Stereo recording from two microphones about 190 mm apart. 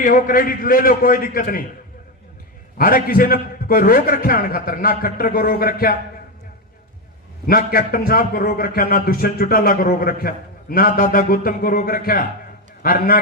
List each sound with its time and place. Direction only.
0.0 s a man's voice: 45° left (ahead or behind)
2.7 s a man's voice: 50° left (ahead or behind)
7.4 s a man's voice: 50° left (ahead or behind)